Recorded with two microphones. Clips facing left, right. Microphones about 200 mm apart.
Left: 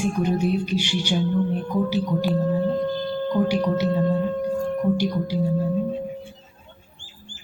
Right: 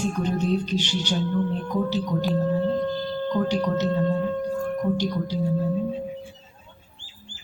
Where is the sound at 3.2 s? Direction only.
10° left (ahead or behind).